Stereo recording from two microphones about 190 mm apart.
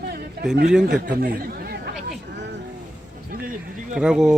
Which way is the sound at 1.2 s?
50° right (ahead or behind).